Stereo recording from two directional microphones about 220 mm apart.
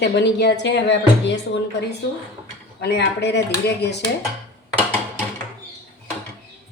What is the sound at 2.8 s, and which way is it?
A woman's voice, 50° left (ahead or behind).